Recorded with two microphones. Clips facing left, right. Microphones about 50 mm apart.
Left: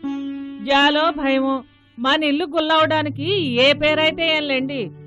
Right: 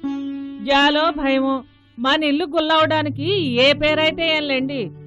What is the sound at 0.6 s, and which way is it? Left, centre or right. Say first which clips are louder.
A woman's voice: even; centre.